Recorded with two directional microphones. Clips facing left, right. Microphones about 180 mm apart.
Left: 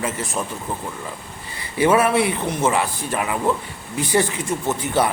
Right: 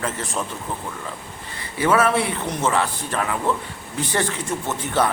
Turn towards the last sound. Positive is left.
turn(degrees=10)  # may be behind; listen again after turning